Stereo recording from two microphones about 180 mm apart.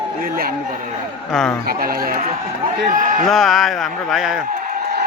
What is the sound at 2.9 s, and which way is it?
Speech, 45° right (ahead or behind).